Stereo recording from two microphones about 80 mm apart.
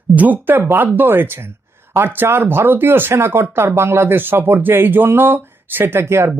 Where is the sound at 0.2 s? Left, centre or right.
Right.